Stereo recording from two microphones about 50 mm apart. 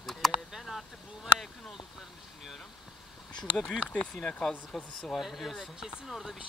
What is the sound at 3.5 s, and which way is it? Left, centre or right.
Speech, centre.